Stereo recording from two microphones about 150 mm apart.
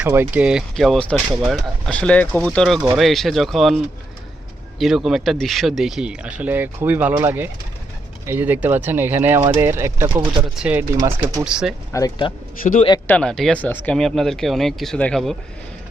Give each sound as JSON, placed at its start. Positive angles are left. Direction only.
{"t": 0.0, "sound": "speech", "side_deg": -10}
{"t": 4.8, "sound": "speech", "side_deg": 0}
{"t": 10.9, "sound": "speech", "side_deg": -20}
{"t": 11.4, "sound": "speech", "side_deg": -5}
{"t": 11.9, "sound": "speech", "side_deg": 20}
{"t": 13.1, "sound": "speech", "side_deg": 5}